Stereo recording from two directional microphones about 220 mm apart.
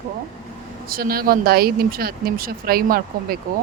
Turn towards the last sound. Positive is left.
turn(degrees=-40)  # may be behind; listen again after turning